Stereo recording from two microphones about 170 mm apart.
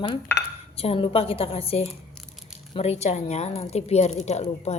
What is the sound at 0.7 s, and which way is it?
A woman's voice, 35° left (ahead or behind).